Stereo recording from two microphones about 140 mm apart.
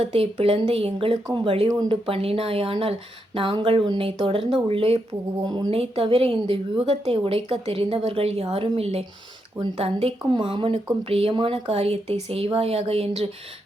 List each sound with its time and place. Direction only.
0.0 s a woman's voice: 45° right (ahead or behind)